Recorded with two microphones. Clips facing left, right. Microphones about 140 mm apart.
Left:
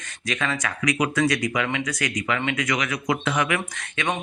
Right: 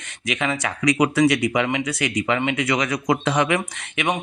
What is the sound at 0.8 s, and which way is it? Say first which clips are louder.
Speech: right 5 dB; 30° right (ahead or behind).